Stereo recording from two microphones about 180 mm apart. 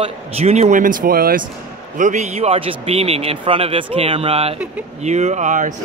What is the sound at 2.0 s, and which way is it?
A man's voice, 40° right (ahead or behind).